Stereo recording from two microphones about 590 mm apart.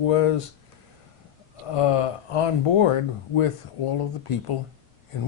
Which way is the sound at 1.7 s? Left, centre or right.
Left.